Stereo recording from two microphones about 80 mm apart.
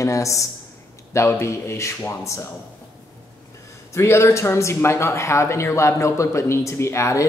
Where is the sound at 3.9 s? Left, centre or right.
Left.